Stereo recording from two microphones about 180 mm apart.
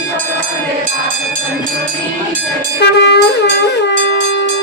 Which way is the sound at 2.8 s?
70° left (ahead or behind).